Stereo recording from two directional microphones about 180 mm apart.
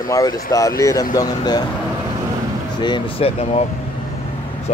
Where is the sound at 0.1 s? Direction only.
20° left (ahead or behind).